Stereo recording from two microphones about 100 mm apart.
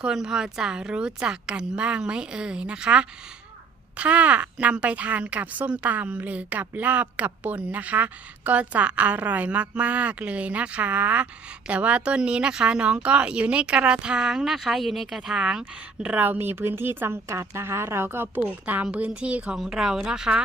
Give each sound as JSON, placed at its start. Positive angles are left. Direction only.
{"t": 0.0, "sound": "a woman's voice", "side_deg": -5}